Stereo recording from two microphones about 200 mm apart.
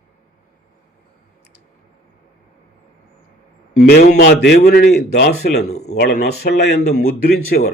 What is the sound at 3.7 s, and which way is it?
A man's voice, 45° left (ahead or behind).